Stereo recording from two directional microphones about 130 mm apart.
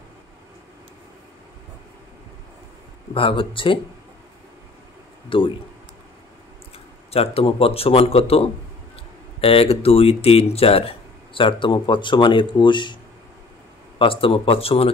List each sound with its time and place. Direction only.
3.2 s speech: 45° left (ahead or behind)
5.3 s speech: 40° left (ahead or behind)
7.1 s speech: 50° left (ahead or behind)
13.9 s speech: 45° left (ahead or behind)